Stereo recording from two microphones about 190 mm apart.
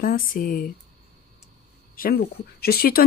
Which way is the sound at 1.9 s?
50° left (ahead or behind).